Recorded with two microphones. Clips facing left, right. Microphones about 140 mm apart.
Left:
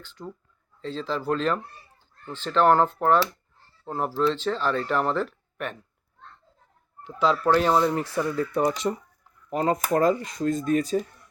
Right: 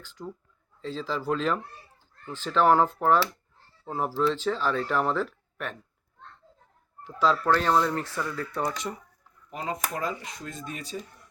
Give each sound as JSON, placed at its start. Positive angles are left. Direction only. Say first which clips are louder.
{"t": 0.0, "sound": "speech", "louder": "even", "side_deg": -10}
{"t": 7.0, "sound": "speech", "louder": "left 1 dB", "side_deg": 0}
{"t": 7.4, "sound": "speech", "louder": "left 3 dB", "side_deg": 10}
{"t": 9.5, "sound": "speech", "louder": "left 9 dB", "side_deg": 45}